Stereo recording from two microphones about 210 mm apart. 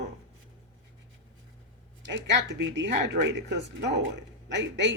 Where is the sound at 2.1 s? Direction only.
60° right (ahead or behind).